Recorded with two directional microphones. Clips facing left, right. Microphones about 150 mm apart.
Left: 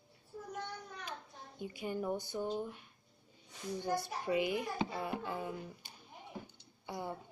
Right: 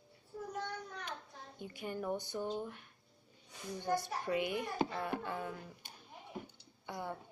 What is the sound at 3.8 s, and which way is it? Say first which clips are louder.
A child's voice: right 1 dB; 5° left (ahead or behind).